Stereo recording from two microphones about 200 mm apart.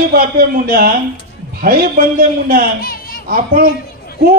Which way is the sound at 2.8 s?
45° left (ahead or behind).